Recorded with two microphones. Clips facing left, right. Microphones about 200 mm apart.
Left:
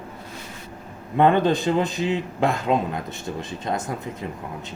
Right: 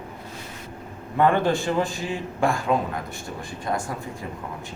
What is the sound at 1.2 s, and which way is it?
A man's voice, 20° left (ahead or behind).